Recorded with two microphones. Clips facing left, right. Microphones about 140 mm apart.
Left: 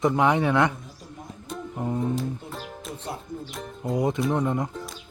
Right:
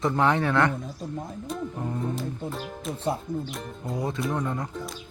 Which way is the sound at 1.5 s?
Centre (ahead or behind).